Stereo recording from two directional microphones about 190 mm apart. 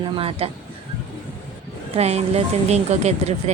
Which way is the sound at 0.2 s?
30° right (ahead or behind).